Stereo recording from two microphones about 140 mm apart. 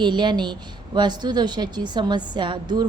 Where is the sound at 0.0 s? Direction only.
35° right (ahead or behind).